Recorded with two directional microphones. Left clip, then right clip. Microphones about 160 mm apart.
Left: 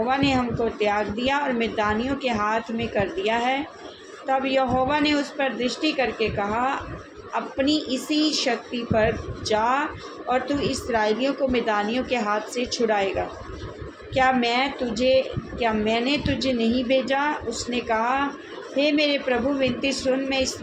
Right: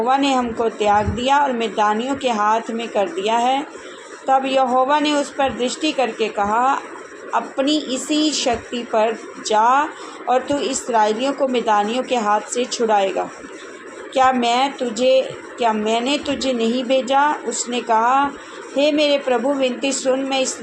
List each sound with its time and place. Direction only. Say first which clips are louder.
0.1 s a woman's voice: right 5 dB; 30° right (ahead or behind)
14.1 s a woman's voice: right 5 dB; 30° right (ahead or behind)